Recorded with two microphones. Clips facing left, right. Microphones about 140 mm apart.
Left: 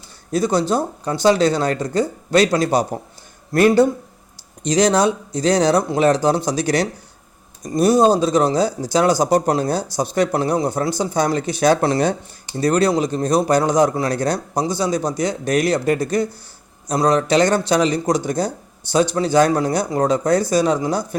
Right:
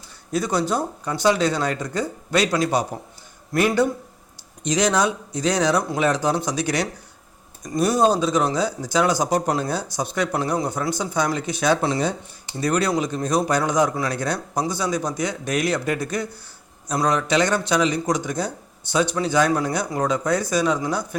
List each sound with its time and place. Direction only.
0.3 s speech: 30° left (ahead or behind)